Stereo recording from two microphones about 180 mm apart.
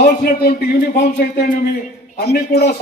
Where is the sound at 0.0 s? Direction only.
60° left (ahead or behind).